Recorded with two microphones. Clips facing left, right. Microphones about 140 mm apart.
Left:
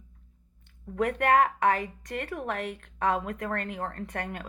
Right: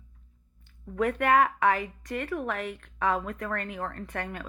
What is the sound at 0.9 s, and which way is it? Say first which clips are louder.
A woman's voice: even; 40° left (ahead or behind).